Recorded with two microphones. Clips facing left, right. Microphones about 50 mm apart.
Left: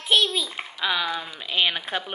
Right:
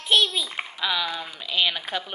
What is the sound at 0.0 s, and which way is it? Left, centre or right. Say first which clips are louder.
Speech: even; centre.